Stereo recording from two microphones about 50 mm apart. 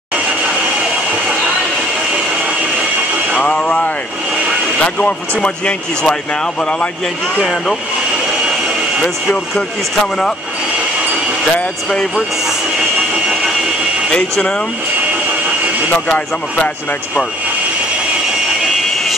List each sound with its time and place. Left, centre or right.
3.3 s a sound: centre
4.7 s vehicle: left
5.4 s speech: centre
14.1 s speech: centre